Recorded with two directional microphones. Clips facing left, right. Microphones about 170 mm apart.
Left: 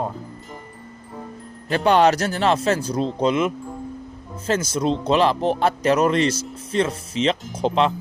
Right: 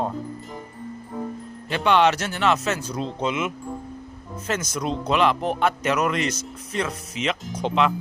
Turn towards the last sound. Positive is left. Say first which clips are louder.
# left 2 dB
turn(degrees=30)  # may be behind; listen again after turning